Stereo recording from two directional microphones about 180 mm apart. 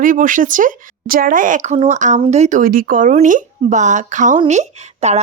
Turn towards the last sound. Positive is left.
turn(degrees=-40)  # may be behind; listen again after turning